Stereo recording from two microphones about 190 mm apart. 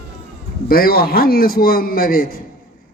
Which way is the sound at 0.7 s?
50° left (ahead or behind).